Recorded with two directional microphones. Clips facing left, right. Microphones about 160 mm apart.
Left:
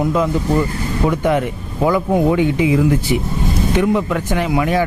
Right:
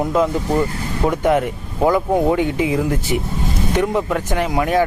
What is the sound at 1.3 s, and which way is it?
Speech, 40° right (ahead or behind).